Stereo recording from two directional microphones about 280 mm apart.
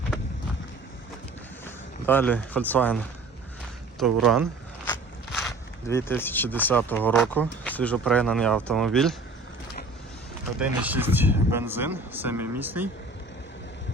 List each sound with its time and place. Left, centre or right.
1.6 s speech: centre
4.9 s biting: centre
5.9 s speech: centre
10.6 s speech: centre